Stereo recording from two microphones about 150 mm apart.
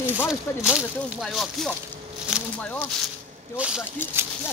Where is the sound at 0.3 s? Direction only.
5° right (ahead or behind).